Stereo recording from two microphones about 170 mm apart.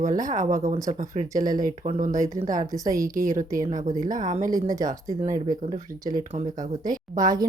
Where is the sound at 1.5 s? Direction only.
55° right (ahead or behind).